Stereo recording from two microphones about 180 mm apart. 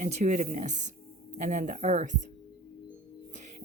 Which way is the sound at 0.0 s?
40° right (ahead or behind).